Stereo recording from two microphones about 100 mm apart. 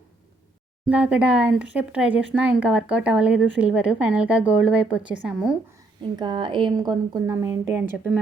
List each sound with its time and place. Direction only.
0.9 s speech: 15° right (ahead or behind)
6.1 s speech: 50° right (ahead or behind)
7.3 s speech: 30° right (ahead or behind)